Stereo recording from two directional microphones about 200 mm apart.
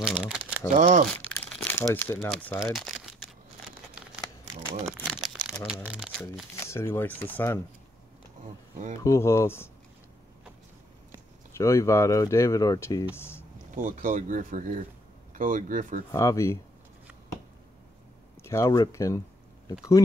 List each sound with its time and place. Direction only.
0.0 s speech: 5° right (ahead or behind)
0.7 s speech: 40° right (ahead or behind)
1.5 s crumpling: 10° left (ahead or behind)
2.1 s speech: centre (ahead or behind)
2.6 s crumpling: centre (ahead or behind)
4.8 s speech: centre (ahead or behind)
6.5 s speech: 15° left (ahead or behind)
8.9 s speech: 15° left (ahead or behind)
11.5 s speech: 15° left (ahead or behind)
13.1 s a sound: 10° left (ahead or behind)
13.7 s speech: 40° right (ahead or behind)
16.1 s speech: 15° left (ahead or behind)
18.4 s speech: 15° left (ahead or behind)